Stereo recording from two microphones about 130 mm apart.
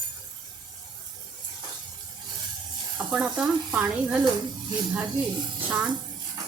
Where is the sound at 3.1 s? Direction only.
5° right (ahead or behind).